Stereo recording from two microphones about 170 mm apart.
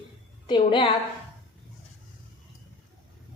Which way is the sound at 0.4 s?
30° left (ahead or behind).